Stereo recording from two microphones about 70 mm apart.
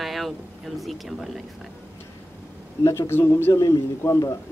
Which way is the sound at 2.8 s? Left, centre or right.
Left.